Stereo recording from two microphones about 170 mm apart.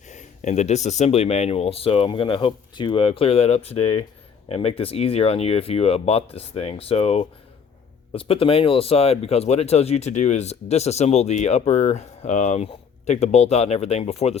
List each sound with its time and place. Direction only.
0.1 s speech: 45° left (ahead or behind)